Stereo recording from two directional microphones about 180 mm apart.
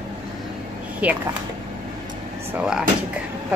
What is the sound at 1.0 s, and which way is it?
Speech, 10° right (ahead or behind).